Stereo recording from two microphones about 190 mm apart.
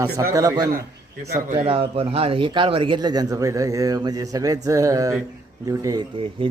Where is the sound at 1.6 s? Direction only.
30° right (ahead or behind).